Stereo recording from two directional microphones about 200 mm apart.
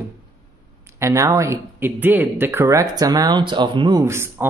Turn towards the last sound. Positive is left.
turn(degrees=-15)  # may be behind; listen again after turning